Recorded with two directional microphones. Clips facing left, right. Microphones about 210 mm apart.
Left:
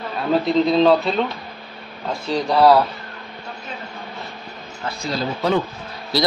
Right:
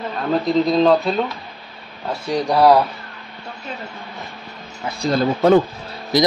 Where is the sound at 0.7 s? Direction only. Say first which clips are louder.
Even; centre (ahead or behind).